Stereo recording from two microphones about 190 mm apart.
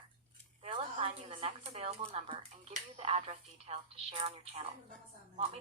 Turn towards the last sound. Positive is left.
turn(degrees=-35)  # may be behind; listen again after turning